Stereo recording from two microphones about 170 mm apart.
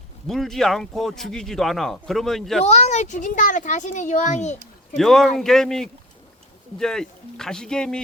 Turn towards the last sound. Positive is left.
turn(degrees=5)  # may be behind; listen again after turning